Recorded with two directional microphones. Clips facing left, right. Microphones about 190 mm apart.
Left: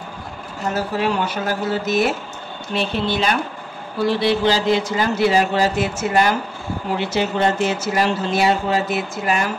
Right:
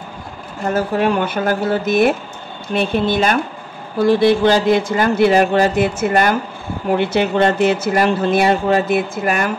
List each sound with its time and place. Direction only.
0.7 s speech: 55° right (ahead or behind)